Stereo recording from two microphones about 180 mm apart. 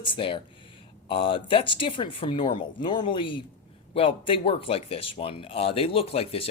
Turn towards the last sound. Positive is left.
turn(degrees=30)  # may be behind; listen again after turning